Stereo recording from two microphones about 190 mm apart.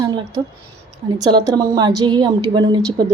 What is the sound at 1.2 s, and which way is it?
A woman's voice, 20° right (ahead or behind).